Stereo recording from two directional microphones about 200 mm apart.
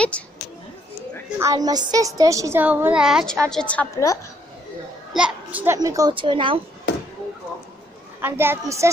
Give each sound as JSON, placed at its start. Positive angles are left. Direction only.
{"t": 0.1, "sound": "speech", "side_deg": 5}
{"t": 1.4, "sound": "a woman's voice", "side_deg": -20}
{"t": 5.1, "sound": "a child's voice", "side_deg": -5}
{"t": 8.2, "sound": "a woman's voice", "side_deg": -10}